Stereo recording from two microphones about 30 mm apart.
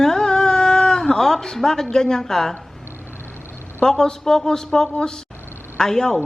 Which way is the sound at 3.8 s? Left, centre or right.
Centre.